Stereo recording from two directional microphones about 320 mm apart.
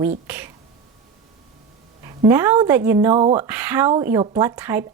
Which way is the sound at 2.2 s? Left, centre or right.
Centre.